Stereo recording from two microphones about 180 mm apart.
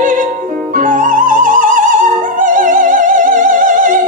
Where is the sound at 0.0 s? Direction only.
45° right (ahead or behind).